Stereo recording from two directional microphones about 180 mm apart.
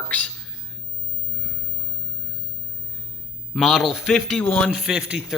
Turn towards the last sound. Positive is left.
turn(degrees=-5)  # may be behind; listen again after turning